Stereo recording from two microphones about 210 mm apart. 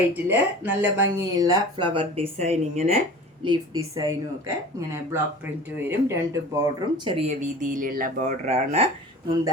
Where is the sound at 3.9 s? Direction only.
15° right (ahead or behind).